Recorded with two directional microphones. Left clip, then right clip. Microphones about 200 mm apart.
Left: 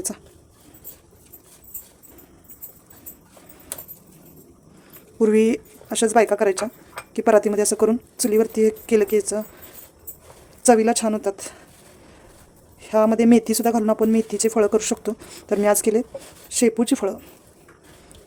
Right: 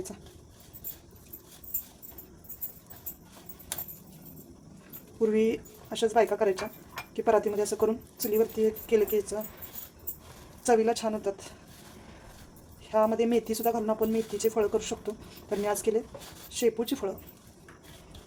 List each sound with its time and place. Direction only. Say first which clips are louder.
5.2 s speech: left 8 dB; 55° left (ahead or behind)
10.6 s speech: left 8 dB; 60° left (ahead or behind)
12.9 s speech: left 8 dB; 60° left (ahead or behind)